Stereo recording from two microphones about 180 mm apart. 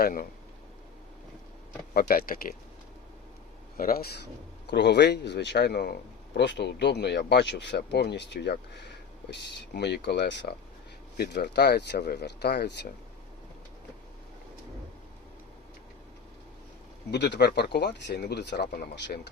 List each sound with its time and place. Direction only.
0.0 s speech: 55° left (ahead or behind)
1.9 s speech: 55° left (ahead or behind)
3.8 s speech: 55° left (ahead or behind)
4.6 s speech: 70° left (ahead or behind)
17.1 s speech: 70° left (ahead or behind)